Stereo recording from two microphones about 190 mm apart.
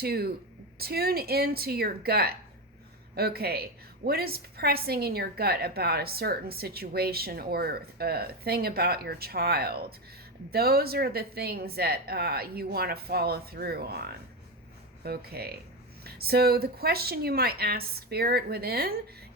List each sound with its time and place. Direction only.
0.0 s a woman's voice: 55° right (ahead or behind)